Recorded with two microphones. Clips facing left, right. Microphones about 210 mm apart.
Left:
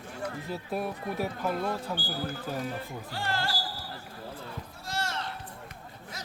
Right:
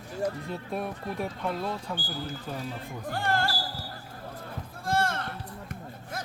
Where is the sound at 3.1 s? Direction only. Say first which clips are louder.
Right 5 dB; 50° right (ahead or behind).